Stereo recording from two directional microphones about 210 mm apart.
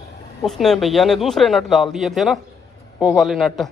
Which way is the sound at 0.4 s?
Centre (ahead or behind).